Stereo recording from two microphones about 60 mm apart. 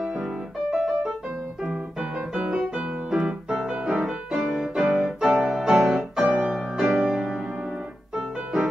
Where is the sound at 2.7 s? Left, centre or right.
Centre.